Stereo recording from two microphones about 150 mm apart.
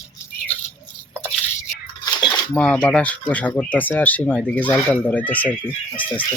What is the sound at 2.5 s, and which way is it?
Speech, 10° left (ahead or behind).